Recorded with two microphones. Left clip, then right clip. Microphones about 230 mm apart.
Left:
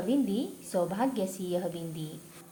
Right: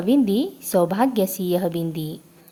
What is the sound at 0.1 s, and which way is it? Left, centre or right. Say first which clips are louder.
A woman's voice: right 12 dB; right.